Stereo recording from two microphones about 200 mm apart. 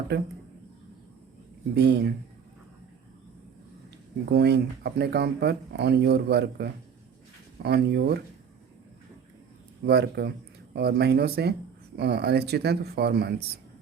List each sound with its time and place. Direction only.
0.1 s speech: 55° right (ahead or behind)
1.7 s speech: 55° right (ahead or behind)
4.3 s speech: 55° right (ahead or behind)
9.8 s speech: 55° right (ahead or behind)